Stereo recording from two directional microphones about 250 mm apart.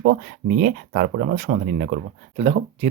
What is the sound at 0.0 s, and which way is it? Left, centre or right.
Speech, right.